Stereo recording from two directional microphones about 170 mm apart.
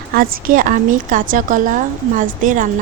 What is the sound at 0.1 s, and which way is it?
A woman's voice, 55° right (ahead or behind).